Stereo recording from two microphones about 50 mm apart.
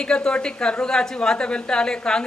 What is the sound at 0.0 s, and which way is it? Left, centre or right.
A woman's voice, centre.